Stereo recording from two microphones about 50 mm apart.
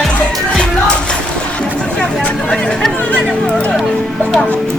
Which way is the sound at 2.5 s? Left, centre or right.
Centre.